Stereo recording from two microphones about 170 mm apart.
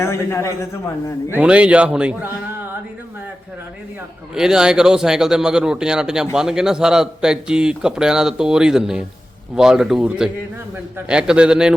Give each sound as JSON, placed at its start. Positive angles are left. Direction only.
{"t": 0.0, "sound": "a man's voice", "side_deg": 15}
{"t": 1.3, "sound": "a man's voice", "side_deg": -5}
{"t": 4.4, "sound": "speech", "side_deg": -5}